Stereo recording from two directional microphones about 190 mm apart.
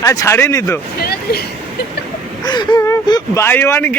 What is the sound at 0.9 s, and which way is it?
Speech, 55° left (ahead or behind).